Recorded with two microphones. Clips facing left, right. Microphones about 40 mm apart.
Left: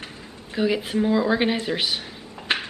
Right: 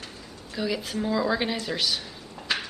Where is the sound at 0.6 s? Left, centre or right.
Left.